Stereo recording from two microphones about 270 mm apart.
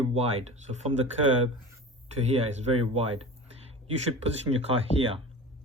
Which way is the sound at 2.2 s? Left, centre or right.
Right.